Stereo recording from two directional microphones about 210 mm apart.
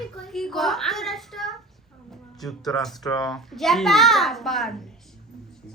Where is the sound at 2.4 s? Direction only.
Centre (ahead or behind).